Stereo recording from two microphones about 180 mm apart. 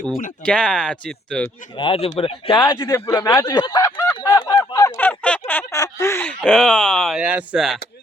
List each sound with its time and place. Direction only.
0.4 s speech: 5° left (ahead or behind)
1.7 s speech: 30° left (ahead or behind)
2.6 s a sound: 20° left (ahead or behind)
5.5 s speech: 15° left (ahead or behind); by 7.8 s centre (ahead or behind)